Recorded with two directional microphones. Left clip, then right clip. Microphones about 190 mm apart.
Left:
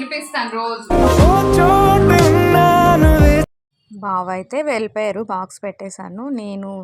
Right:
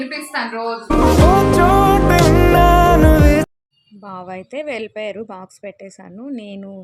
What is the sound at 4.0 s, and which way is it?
A woman's voice, 20° left (ahead or behind).